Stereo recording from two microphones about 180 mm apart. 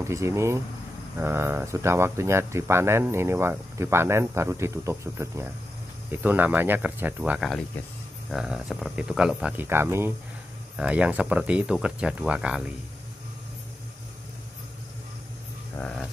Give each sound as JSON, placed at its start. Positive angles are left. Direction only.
{"t": 0.0, "sound": "speech", "side_deg": -15}
{"t": 15.8, "sound": "speech", "side_deg": 5}